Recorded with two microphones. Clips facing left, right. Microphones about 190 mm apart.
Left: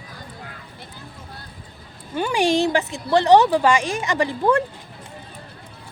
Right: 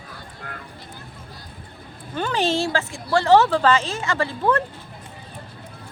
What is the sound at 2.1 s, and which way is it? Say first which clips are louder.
Speech: left 3 dB; 10° left (ahead or behind).